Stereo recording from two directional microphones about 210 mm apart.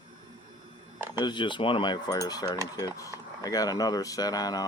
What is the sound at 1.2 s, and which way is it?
Cutlery, 20° left (ahead or behind).